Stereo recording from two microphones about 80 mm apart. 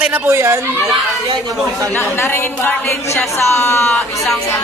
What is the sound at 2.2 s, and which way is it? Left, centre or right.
A woman's voice, left.